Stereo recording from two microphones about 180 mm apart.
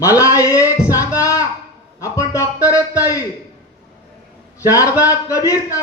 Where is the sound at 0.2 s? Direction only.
15° left (ahead or behind).